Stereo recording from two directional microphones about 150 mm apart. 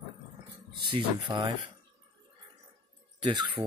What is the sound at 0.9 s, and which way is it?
Speech, 30° right (ahead or behind).